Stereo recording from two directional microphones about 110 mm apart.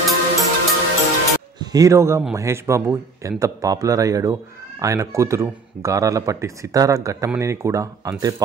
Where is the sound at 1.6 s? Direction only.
35° right (ahead or behind).